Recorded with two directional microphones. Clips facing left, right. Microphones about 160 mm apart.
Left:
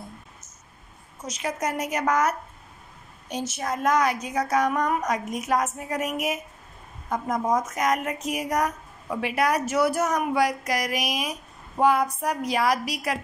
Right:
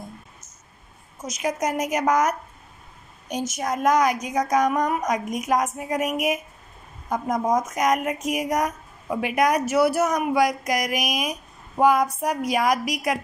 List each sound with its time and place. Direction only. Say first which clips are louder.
1.2 s speech: right 3 dB; 10° right (ahead or behind)